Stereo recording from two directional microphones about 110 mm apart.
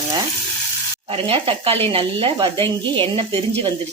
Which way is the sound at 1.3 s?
60° right (ahead or behind).